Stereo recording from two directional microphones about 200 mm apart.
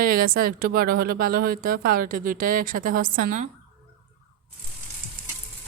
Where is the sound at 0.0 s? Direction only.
45° right (ahead or behind).